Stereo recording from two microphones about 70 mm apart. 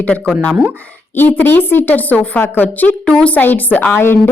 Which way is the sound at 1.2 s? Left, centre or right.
Left.